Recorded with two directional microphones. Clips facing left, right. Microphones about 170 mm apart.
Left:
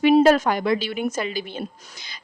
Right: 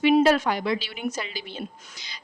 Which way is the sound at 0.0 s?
45° left (ahead or behind).